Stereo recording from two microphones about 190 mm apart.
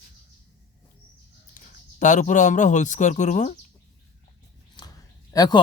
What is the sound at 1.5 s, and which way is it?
Speech, 40° left (ahead or behind).